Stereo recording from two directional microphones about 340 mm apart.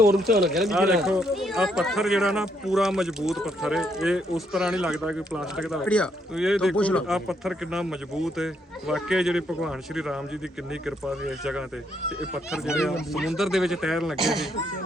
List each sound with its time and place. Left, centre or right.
0.4 s speech: centre